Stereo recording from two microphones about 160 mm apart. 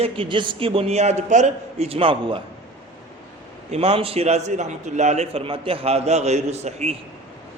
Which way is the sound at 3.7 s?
35° right (ahead or behind).